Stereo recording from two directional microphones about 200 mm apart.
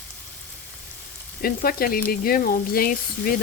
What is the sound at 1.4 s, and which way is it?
Speech, 45° left (ahead or behind).